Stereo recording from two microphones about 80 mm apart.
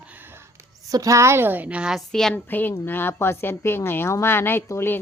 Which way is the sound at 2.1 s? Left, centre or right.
Centre.